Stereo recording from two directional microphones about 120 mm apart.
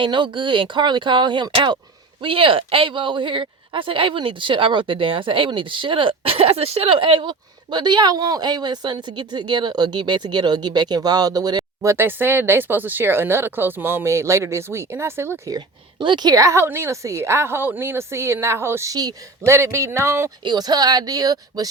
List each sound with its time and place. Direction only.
0.0 s speech: 40° right (ahead or behind); by 15.5 s 20° right (ahead or behind)
15.5 s a woman's voice: 40° right (ahead or behind); by 20.3 s 20° right (ahead or behind)
20.4 s speech: 35° right (ahead or behind)